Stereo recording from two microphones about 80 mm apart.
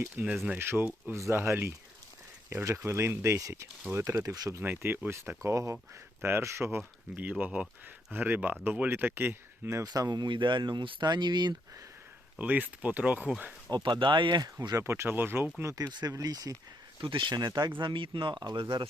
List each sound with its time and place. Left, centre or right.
0.2 s speech: right
4.6 s speech: right
9.8 s speech: right
10.2 s speech: right
12.4 s speech: right
13.7 s speech: right
14.4 s speech: right
14.8 s speech: right
15.9 s speech: right
16.1 s speech: right
17.0 s speech: right
17.7 s speech: right